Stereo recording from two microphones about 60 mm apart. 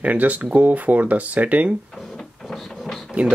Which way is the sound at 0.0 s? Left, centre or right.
Right.